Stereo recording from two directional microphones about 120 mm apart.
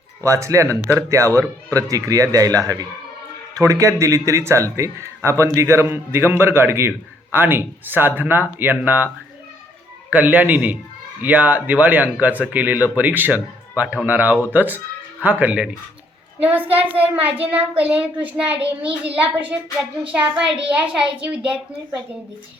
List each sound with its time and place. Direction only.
0.3 s speech: 25° right (ahead or behind)
10.1 s speech: 15° right (ahead or behind)
16.6 s a child's voice: 50° right (ahead or behind)
16.9 s speech: 15° right (ahead or behind)